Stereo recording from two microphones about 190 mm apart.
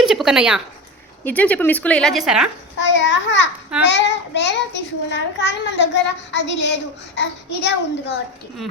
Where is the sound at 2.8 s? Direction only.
70° left (ahead or behind).